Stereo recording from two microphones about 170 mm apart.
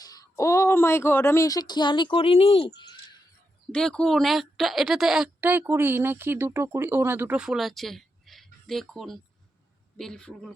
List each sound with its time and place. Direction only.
0.0 s speech: 20° left (ahead or behind)
2.7 s a sound: 25° left (ahead or behind)
3.7 s a woman's voice: 5° left (ahead or behind)